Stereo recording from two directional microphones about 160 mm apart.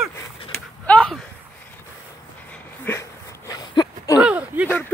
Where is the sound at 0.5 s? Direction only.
5° left (ahead or behind).